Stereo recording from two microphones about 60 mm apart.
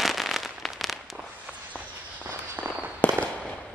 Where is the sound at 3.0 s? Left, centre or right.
Left.